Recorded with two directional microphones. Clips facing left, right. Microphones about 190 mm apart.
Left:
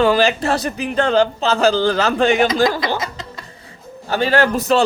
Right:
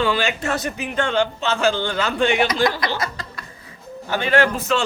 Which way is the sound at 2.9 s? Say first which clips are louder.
Left 2 dB; 20° left (ahead or behind).